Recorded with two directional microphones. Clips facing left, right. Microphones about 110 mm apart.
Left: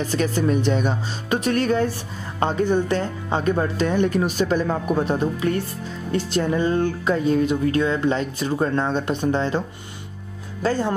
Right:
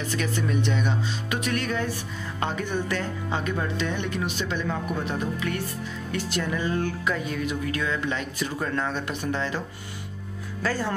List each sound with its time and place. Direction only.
0.0 s speech: 35° left (ahead or behind)
10.6 s speech: 25° left (ahead or behind)